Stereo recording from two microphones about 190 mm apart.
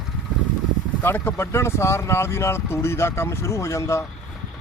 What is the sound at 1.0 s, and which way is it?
Speech, 10° left (ahead or behind).